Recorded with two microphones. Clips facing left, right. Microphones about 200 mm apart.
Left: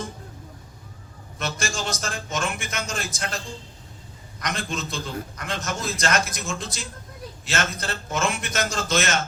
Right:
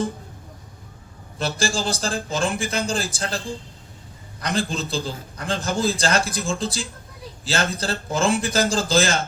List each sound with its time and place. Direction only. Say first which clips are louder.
1.4 s a man's voice: right 5 dB; 30° right (ahead or behind)